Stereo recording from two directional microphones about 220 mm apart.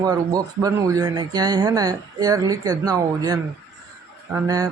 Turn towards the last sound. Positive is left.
turn(degrees=-15)  # may be behind; listen again after turning